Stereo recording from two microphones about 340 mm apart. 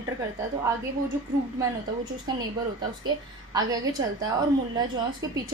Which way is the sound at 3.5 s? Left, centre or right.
Centre.